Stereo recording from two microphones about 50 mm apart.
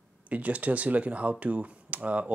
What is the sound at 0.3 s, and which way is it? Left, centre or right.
Speech, right.